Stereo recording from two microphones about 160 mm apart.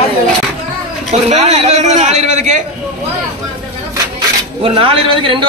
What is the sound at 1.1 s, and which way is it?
A man's voice, 40° right (ahead or behind).